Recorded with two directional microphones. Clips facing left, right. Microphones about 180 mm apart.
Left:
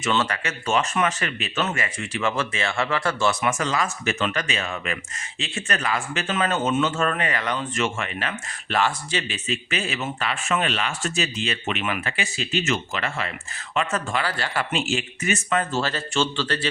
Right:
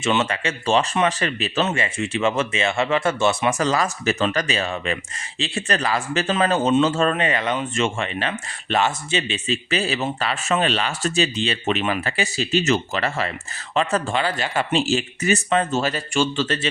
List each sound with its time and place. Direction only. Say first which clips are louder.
0.0 s speech: right 3 dB; 25° right (ahead or behind)
3.6 s speech: right 4 dB; 40° right (ahead or behind)
15.8 s speech: right 3 dB; 15° right (ahead or behind)